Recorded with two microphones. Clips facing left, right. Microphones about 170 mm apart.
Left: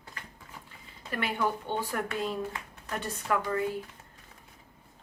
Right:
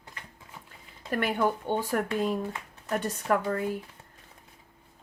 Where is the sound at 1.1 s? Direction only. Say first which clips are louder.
Right 4 dB; 45° right (ahead or behind).